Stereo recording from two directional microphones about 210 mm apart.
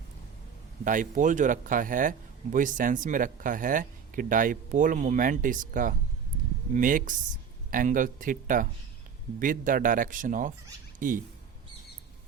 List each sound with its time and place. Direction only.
0.9 s speech: 40° right (ahead or behind)